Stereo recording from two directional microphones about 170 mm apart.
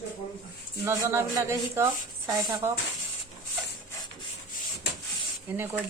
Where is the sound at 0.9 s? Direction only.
15° right (ahead or behind).